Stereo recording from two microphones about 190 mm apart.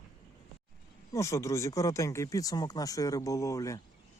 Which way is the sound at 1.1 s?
15° left (ahead or behind).